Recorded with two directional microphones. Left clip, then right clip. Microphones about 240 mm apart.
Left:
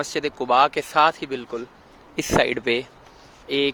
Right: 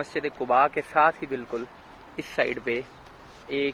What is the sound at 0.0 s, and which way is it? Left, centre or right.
Speech, left.